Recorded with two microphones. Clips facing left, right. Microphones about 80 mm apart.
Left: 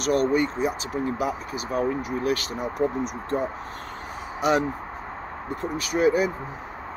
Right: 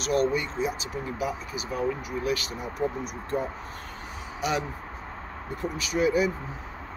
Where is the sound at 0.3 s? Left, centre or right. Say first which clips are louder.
Left 5 dB; left.